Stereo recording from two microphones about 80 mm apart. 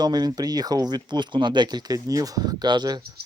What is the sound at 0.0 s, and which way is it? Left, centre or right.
Speech, right.